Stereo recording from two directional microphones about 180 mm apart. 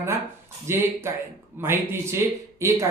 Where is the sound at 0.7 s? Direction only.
15° right (ahead or behind).